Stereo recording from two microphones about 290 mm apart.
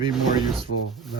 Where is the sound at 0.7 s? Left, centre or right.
Left.